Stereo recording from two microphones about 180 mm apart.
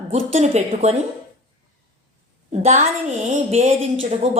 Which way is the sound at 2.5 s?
40° right (ahead or behind).